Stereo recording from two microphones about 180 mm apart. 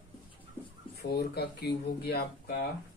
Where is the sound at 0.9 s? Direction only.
65° left (ahead or behind).